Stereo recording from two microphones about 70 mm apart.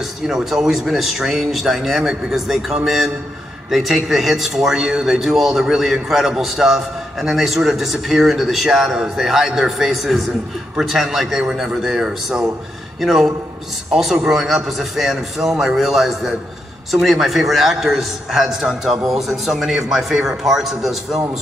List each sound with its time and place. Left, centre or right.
0.3 s a man's voice: centre